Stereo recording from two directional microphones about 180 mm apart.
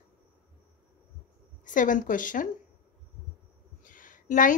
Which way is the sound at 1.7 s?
45° left (ahead or behind).